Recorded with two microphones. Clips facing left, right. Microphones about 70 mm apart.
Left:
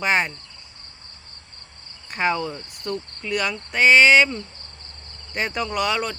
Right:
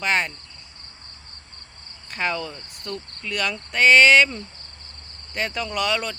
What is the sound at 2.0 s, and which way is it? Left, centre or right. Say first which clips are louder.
Speech: left 3 dB; centre.